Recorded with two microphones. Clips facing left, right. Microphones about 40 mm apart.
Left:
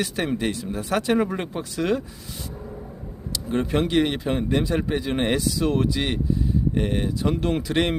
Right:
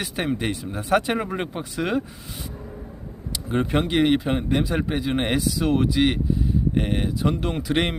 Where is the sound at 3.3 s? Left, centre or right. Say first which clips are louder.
Right 1 dB; centre.